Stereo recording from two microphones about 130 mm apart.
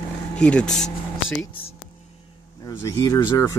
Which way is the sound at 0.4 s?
10° left (ahead or behind).